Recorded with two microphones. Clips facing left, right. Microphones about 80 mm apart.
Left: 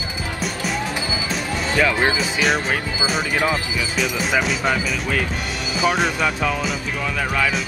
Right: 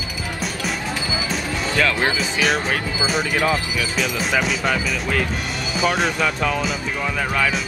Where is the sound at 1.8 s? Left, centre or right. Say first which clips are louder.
Left 2 dB; centre.